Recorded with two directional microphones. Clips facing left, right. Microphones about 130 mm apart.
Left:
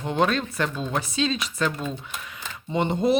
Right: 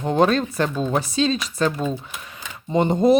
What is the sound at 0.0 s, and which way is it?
Speech, 40° right (ahead or behind).